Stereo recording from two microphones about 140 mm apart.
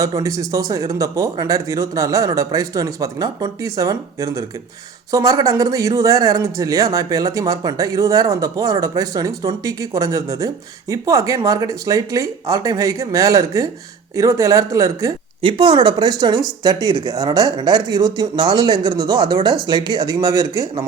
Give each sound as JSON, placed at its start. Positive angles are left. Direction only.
{"t": 0.0, "sound": "speech", "side_deg": -25}
{"t": 15.4, "sound": "speech", "side_deg": -40}